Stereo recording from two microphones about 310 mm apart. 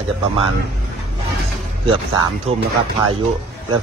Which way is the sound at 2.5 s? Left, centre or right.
Centre.